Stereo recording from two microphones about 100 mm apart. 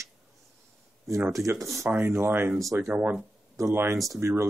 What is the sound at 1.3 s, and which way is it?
Speech, 30° right (ahead or behind).